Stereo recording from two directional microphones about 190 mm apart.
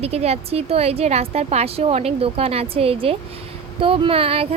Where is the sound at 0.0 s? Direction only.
35° right (ahead or behind).